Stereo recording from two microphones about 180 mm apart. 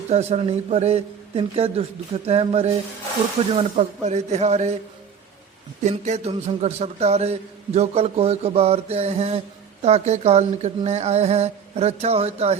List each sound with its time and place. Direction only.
0.1 s speech: 35° right (ahead or behind)
5.8 s speech: 40° right (ahead or behind)